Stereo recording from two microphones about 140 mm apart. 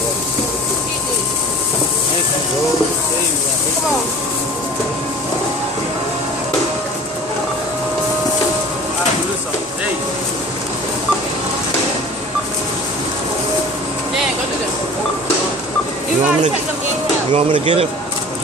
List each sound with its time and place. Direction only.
17.3 s speech: 45° right (ahead or behind)